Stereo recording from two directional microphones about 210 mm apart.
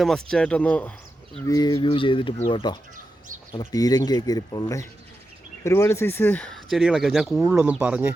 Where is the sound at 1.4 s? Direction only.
15° left (ahead or behind).